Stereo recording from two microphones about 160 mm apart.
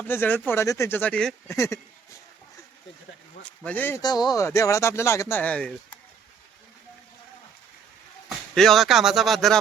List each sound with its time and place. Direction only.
0.0 s speech: 15° left (ahead or behind)
1.5 s speech: 20° left (ahead or behind)
3.4 s speech: 10° left (ahead or behind)
4.0 s speech: 25° left (ahead or behind); by 5.7 s 5° left (ahead or behind)
8.5 s speech: centre (ahead or behind)